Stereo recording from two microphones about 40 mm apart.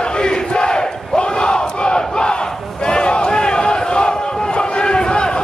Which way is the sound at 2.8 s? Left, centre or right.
Left.